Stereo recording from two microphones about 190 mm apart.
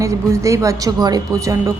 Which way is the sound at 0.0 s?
15° right (ahead or behind).